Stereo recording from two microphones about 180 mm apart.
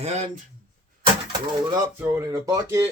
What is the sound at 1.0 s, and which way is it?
Bird, 25° right (ahead or behind).